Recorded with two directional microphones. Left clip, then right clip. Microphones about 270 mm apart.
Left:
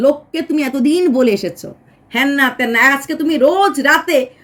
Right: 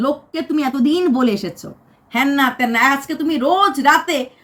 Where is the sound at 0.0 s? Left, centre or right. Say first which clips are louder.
Left 6 dB; centre.